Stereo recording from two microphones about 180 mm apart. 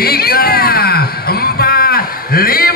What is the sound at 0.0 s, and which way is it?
Music, 60° left (ahead or behind).